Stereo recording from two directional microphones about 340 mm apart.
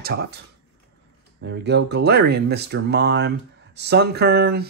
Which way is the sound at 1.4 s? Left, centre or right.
Right.